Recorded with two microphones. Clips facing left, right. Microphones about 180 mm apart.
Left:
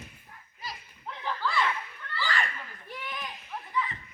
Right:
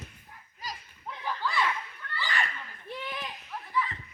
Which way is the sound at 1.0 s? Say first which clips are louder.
Left 1 dB; 15° right (ahead or behind).